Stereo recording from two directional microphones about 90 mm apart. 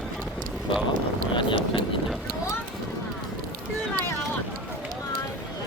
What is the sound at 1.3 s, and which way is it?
Speech, 65° left (ahead or behind).